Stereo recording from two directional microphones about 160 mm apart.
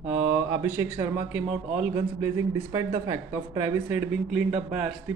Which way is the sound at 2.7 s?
25° right (ahead or behind).